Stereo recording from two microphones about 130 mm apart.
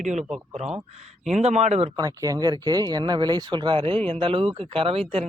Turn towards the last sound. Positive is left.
turn(degrees=-50)  # may be behind; listen again after turning